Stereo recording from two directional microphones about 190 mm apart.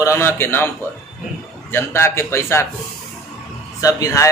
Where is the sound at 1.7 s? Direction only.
15° left (ahead or behind).